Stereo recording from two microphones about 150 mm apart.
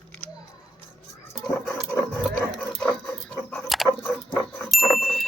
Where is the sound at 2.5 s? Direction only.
10° left (ahead or behind).